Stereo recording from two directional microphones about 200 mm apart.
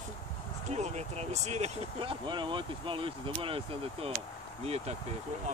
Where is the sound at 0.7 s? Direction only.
35° right (ahead or behind).